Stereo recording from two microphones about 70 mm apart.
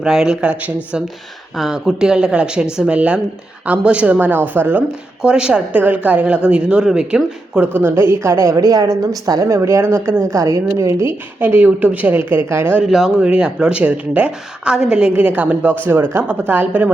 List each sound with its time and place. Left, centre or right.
0.0 s speech: centre
1.5 s speech: centre; by 4.8 s right
5.2 s speech: centre
7.6 s a woman's voice: right
8.5 s speech: right
10.2 s speech: right
11.3 s speech: right
12.8 s speech: centre
15.1 s speech: right